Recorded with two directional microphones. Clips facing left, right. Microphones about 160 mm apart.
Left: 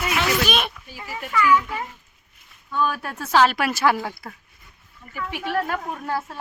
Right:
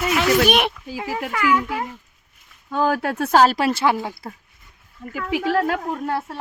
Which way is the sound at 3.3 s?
40° right (ahead or behind).